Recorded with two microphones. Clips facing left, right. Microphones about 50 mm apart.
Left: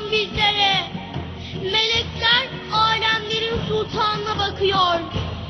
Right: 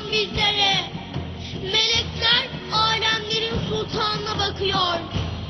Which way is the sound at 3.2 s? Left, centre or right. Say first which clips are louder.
Left 2 dB; left.